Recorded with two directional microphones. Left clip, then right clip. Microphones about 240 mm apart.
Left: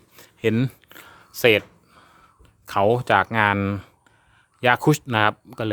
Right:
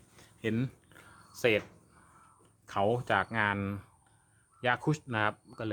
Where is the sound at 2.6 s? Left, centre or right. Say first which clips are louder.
Left 11 dB; left.